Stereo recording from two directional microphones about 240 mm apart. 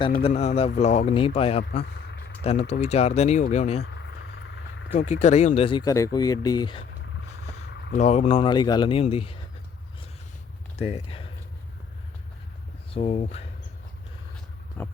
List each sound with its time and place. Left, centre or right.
0.2 s speech: left
1.7 s vehicle: left
2.4 s speech: left
3.8 s a sound: left
4.9 s speech: left
7.9 s speech: left
10.8 s speech: left
12.9 s speech: left
14.8 s a sound: centre